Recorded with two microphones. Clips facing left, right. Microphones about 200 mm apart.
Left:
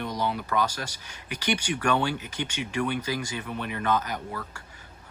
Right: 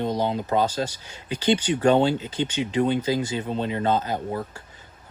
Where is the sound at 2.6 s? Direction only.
20° right (ahead or behind).